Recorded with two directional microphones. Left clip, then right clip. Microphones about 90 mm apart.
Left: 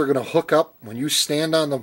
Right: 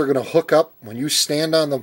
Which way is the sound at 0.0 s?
10° right (ahead or behind).